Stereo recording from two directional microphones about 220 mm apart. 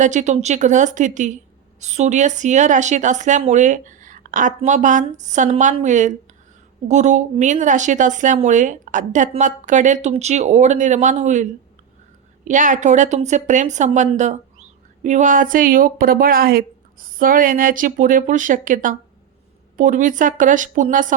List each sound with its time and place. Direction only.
0.0 s a woman's voice: 35° right (ahead or behind)
12.5 s a woman's voice: 35° right (ahead or behind)